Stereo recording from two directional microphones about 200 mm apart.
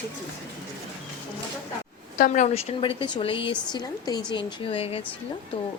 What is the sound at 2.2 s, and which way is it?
Speech, 40° left (ahead or behind).